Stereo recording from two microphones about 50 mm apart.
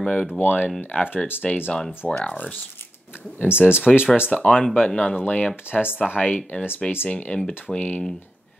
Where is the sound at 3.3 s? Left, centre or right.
Left.